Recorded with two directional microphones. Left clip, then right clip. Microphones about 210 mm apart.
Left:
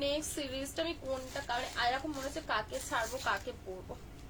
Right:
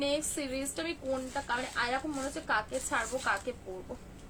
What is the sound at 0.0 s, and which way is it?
A woman's voice, 20° right (ahead or behind).